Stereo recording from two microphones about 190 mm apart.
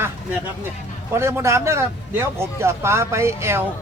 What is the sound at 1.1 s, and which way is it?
Speech, 15° right (ahead or behind).